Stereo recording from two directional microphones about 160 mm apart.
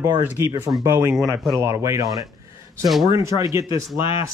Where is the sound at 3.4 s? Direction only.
20° right (ahead or behind).